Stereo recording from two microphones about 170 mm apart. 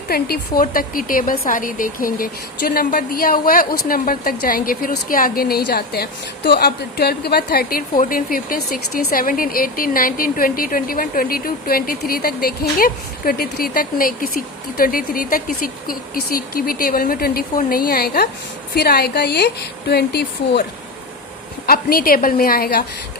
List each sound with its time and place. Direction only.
0.1 s a woman's voice: 60° left (ahead or behind)
21.7 s a woman's voice: 60° left (ahead or behind)